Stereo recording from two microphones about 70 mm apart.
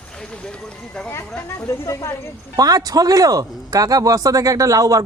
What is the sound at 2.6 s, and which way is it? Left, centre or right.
Speech, right.